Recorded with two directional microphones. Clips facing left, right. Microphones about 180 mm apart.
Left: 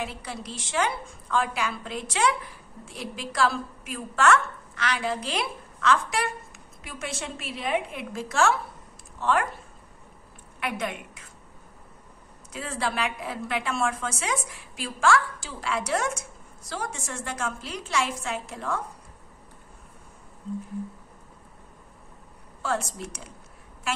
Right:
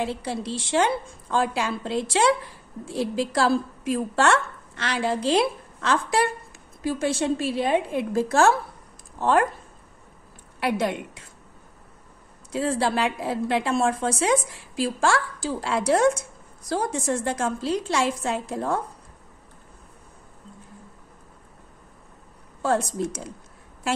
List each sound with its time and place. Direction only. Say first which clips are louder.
0.0 s a woman's voice: right 7 dB; 30° right (ahead or behind)
10.6 s a woman's voice: right 7 dB; 30° right (ahead or behind)
12.5 s a woman's voice: right 7 dB; 35° right (ahead or behind)
22.6 s a woman's voice: right 6 dB; 40° right (ahead or behind)